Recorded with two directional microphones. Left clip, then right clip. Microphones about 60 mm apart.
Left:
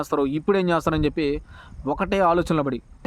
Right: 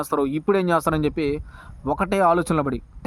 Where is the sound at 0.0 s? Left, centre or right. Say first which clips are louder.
Even; right.